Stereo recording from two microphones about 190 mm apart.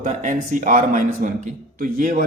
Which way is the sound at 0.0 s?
40° right (ahead or behind).